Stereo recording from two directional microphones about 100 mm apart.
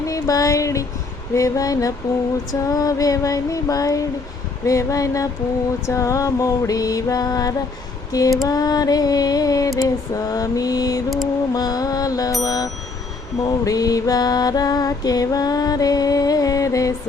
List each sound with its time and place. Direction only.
0.1 s a sound: 35° left (ahead or behind)
1.3 s music: 30° left (ahead or behind)
13.4 s mantra: 35° left (ahead or behind)